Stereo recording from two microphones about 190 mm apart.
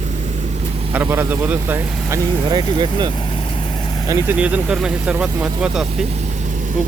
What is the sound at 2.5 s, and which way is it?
Speech, 25° right (ahead or behind).